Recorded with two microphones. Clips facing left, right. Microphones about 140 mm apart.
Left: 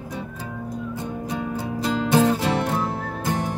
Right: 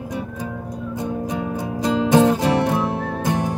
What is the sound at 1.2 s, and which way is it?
Music, 15° right (ahead or behind).